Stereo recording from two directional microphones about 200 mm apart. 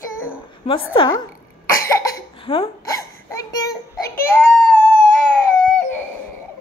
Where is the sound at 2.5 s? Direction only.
30° left (ahead or behind).